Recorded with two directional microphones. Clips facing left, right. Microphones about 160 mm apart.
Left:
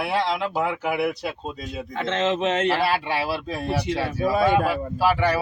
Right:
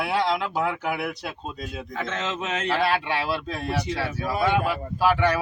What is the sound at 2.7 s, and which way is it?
Speech, 10° left (ahead or behind).